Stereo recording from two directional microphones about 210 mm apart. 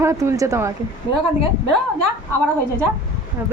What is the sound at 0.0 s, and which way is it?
Speech, 15° right (ahead or behind).